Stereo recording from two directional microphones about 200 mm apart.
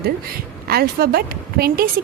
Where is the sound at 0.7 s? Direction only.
50° right (ahead or behind).